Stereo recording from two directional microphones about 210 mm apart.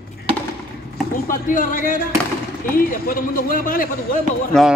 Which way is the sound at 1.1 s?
40° left (ahead or behind).